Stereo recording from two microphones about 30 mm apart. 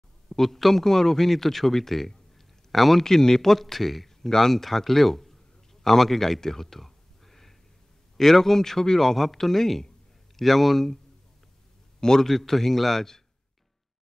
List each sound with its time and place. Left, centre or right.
0.3 s a man's voice: centre
3.0 s a man's voice: centre
3.6 s a man's voice: centre
12.0 s a man's voice: left
12.3 s a man's voice: centre